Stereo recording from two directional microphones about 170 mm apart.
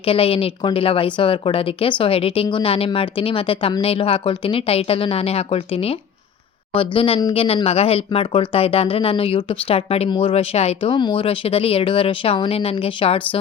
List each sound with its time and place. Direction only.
0.0 s speech: 35° left (ahead or behind)